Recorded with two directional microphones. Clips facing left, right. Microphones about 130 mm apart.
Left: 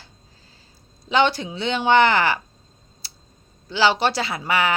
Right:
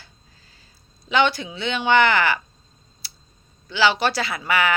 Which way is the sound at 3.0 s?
35° left (ahead or behind).